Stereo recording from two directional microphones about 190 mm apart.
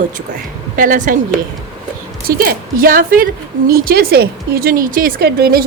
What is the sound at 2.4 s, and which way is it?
A woman's voice, 50° right (ahead or behind).